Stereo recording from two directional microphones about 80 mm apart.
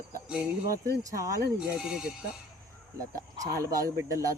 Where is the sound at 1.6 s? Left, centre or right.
Centre.